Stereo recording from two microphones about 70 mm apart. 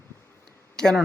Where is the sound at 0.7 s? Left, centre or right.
Centre.